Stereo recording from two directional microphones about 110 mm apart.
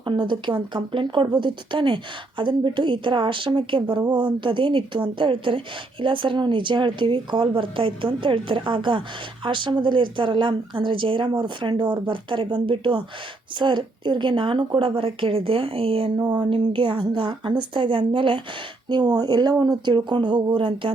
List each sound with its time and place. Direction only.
0.0 s speech: 45° right (ahead or behind)
16.1 s speech: 40° right (ahead or behind)
18.9 s speech: 40° right (ahead or behind)